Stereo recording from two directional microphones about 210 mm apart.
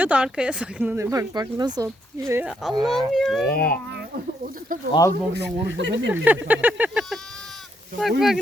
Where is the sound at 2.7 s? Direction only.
20° right (ahead or behind).